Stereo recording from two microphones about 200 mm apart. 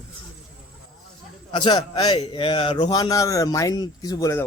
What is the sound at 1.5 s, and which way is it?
A man's voice, 20° left (ahead or behind).